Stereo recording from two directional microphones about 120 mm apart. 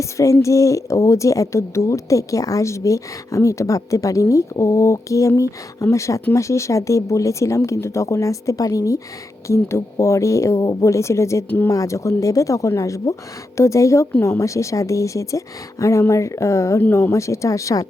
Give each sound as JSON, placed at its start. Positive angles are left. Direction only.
{"t": 0.0, "sound": "speech", "side_deg": 25}